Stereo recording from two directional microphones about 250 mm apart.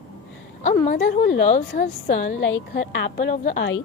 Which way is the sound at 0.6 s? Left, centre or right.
Left.